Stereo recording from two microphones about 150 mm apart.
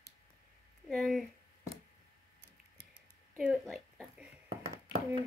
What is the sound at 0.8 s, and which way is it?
Speech, centre (ahead or behind).